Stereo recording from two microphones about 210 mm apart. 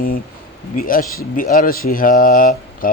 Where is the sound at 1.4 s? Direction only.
40° left (ahead or behind).